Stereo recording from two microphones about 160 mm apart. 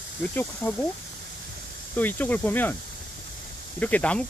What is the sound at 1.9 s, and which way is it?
Speech, 10° left (ahead or behind).